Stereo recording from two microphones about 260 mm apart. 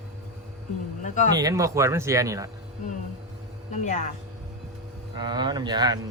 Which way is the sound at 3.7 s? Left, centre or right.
Left.